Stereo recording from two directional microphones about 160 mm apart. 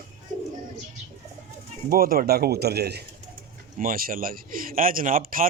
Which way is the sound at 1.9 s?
65° right (ahead or behind).